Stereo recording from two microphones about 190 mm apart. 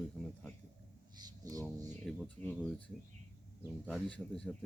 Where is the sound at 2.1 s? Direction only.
Centre (ahead or behind).